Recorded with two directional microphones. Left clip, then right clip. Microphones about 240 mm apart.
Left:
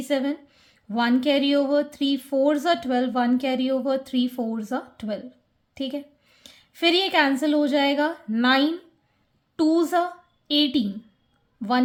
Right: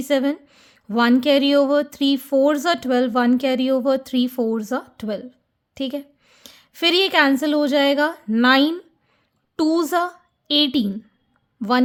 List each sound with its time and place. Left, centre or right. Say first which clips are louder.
0.0 s a woman's voice: right 5 dB; right